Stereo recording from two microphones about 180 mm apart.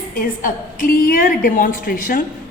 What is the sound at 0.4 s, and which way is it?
A woman's voice, 50° left (ahead or behind).